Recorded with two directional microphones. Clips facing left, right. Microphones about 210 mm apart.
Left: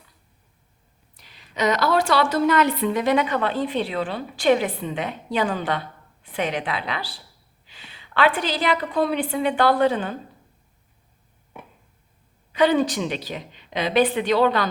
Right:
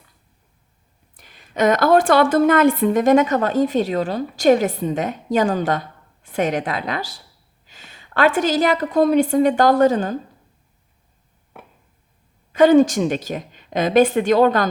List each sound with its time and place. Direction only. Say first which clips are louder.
1.1 s a sound: right 6 dB; 50° right (ahead or behind)
2.3 s a woman's voice: right 5 dB; 50° right (ahead or behind)
12.5 s a woman's voice: right 7 dB; 45° right (ahead or behind)